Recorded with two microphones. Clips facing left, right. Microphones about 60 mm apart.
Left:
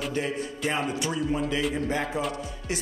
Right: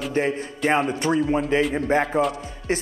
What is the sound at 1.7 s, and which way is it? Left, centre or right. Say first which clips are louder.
Speech: right 7 dB; right.